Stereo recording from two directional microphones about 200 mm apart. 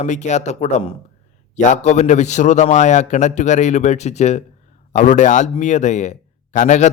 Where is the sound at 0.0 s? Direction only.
35° left (ahead or behind).